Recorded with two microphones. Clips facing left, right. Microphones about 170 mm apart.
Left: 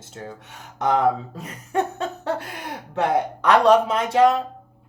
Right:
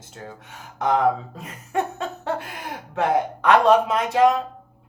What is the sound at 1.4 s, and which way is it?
Laughter, 35° left (ahead or behind).